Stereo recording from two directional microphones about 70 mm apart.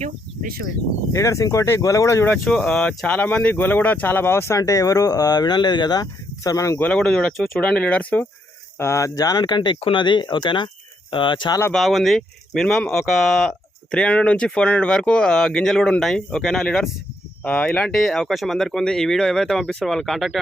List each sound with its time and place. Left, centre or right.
1.1 s speech: left
2.4 s speech: centre; by 6.7 s left
6.9 s speech: centre
7.6 s speech: centre
8.8 s speech: left
9.3 s speech: left
11.7 s speech: centre
13.9 s speech: centre
17.4 s speech: left
17.9 s speech: centre